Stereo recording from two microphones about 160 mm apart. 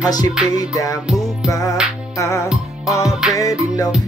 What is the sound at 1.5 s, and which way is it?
Music, 20° left (ahead or behind).